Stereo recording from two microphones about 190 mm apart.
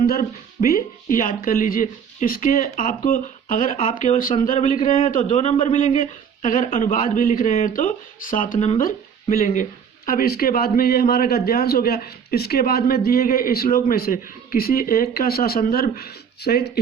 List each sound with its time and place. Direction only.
0.0 s a man's voice: 50° left (ahead or behind)
8.5 s speech: 35° left (ahead or behind)
8.8 s a man's voice: 45° left (ahead or behind)